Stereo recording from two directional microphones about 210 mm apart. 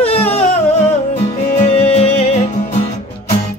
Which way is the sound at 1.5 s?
30° left (ahead or behind).